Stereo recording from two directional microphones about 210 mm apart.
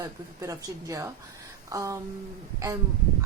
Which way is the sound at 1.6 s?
15° right (ahead or behind).